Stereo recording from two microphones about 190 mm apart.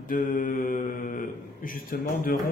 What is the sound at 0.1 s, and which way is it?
Speech, 45° left (ahead or behind).